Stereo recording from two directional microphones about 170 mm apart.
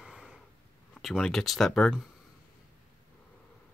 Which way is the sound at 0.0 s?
5° right (ahead or behind).